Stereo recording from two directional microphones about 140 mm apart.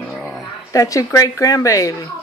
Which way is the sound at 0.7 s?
25° left (ahead or behind).